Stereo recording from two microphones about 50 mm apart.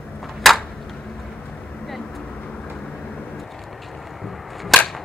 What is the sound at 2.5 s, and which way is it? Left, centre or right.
Vehicle, left.